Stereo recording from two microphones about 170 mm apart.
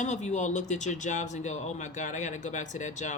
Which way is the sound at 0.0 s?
45° left (ahead or behind).